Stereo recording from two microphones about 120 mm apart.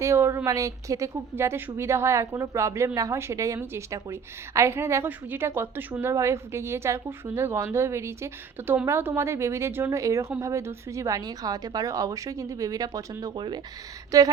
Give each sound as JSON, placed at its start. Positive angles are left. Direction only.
{"t": 0.0, "sound": "a woman's voice", "side_deg": -20}